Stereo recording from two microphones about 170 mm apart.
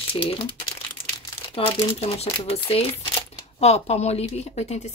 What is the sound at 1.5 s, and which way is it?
A woman's voice, 35° left (ahead or behind).